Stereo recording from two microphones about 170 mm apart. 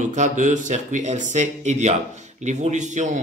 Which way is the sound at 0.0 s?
45° right (ahead or behind).